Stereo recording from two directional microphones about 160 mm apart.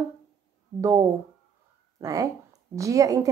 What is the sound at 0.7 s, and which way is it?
A woman's voice, 20° right (ahead or behind).